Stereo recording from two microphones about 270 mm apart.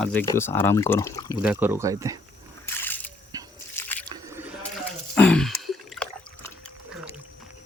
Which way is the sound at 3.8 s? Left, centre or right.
Centre.